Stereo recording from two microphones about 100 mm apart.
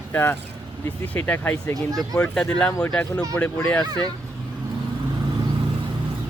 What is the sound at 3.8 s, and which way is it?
Speech, 45° right (ahead or behind).